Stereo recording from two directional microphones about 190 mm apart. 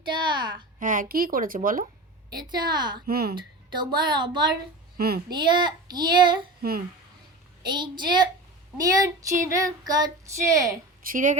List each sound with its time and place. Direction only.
0.0 s a sound: 25° right (ahead or behind)
0.8 s a woman's voice: 45° right (ahead or behind)
2.3 s a woman's voice: 20° right (ahead or behind)
3.1 s a woman's voice: 55° right (ahead or behind)
3.3 s a woman's voice: 25° right (ahead or behind)
4.9 s speech: 55° right (ahead or behind)
5.3 s a woman's voice: 25° right (ahead or behind)
6.6 s speech: 50° right (ahead or behind)
7.6 s a woman's voice: 25° right (ahead or behind)
9.0 s child singing: 20° right (ahead or behind)
11.0 s a woman's voice: 45° right (ahead or behind)